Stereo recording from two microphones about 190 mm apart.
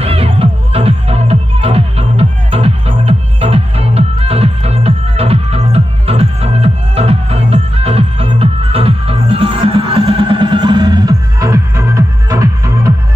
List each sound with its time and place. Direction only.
0.0 s music: 30° right (ahead or behind)